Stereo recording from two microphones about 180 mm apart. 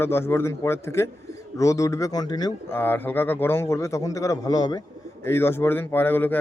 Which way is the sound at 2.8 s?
10° left (ahead or behind).